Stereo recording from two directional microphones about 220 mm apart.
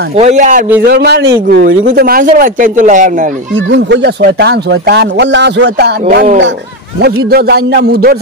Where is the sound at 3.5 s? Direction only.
55° right (ahead or behind).